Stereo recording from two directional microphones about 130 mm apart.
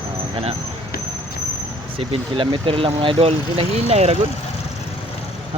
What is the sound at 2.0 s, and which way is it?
Speech, 40° right (ahead or behind).